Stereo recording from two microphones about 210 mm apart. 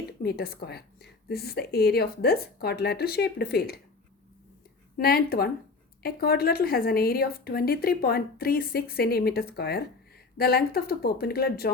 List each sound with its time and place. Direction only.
0.2 s speech: 50° left (ahead or behind)
4.9 s speech: 45° left (ahead or behind)